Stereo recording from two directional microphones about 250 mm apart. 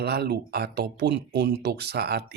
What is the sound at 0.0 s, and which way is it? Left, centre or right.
Speech, right.